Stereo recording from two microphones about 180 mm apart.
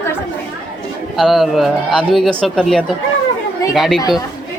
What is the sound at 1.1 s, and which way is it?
A man's voice, centre (ahead or behind).